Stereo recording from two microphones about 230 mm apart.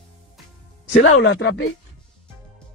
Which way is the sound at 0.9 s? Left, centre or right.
Left.